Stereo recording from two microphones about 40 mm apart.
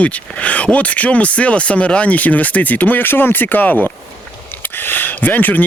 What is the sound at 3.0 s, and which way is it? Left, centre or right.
Speech, left.